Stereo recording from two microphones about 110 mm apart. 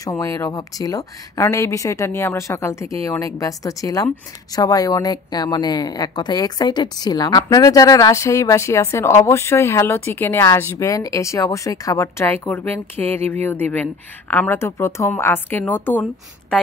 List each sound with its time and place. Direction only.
0.0 s a woman's voice: 30° left (ahead or behind)